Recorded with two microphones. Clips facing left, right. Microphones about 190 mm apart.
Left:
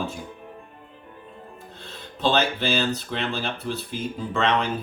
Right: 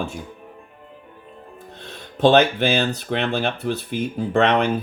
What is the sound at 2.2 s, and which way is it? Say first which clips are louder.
Speech: right 8 dB; 60° right (ahead or behind).